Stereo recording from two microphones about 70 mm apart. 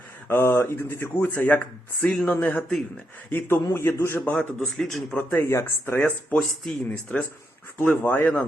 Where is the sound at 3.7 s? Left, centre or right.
Left.